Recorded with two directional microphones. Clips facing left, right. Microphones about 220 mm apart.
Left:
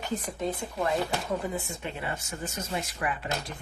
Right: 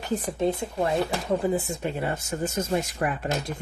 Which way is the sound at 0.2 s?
30° right (ahead or behind).